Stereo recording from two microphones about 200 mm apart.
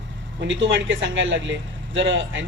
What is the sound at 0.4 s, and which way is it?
A woman's voice, 70° right (ahead or behind).